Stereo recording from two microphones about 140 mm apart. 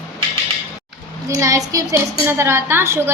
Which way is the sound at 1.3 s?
20° right (ahead or behind).